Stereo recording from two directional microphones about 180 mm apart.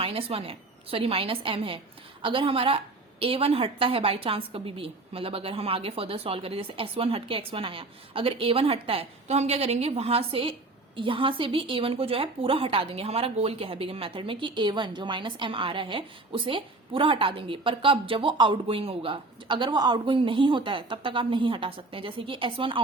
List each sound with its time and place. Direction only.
0.0 s a woman's voice: 30° right (ahead or behind)